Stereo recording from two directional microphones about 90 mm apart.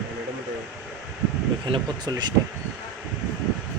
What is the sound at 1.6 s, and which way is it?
Speech, 60° right (ahead or behind).